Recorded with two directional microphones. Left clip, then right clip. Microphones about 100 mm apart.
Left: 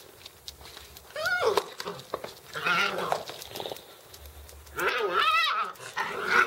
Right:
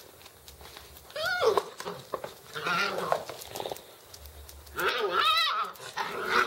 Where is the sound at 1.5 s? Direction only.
25° left (ahead or behind).